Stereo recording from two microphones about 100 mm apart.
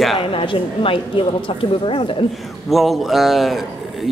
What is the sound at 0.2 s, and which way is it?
Speech, 65° left (ahead or behind).